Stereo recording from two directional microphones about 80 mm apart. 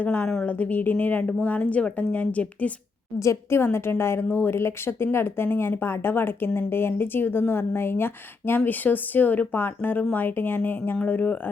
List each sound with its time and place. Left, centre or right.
0.0 s a woman's voice: left
3.2 s a woman's voice: left